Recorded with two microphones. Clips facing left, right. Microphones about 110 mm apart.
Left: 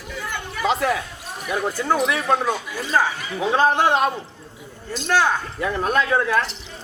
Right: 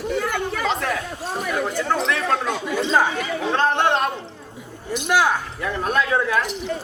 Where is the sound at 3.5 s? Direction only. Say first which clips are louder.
Left 2 dB; 5° left (ahead or behind).